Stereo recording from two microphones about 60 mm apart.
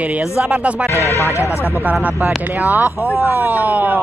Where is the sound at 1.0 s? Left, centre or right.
Right.